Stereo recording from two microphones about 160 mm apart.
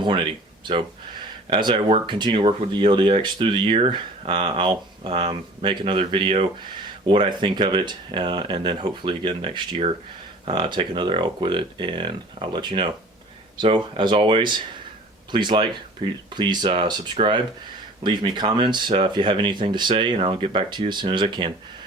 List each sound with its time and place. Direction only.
0.6 s speech: 30° right (ahead or behind)